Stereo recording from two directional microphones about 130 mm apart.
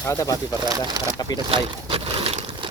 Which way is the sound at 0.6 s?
35° right (ahead or behind).